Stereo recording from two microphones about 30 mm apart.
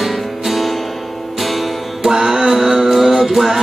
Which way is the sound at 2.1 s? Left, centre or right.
Centre.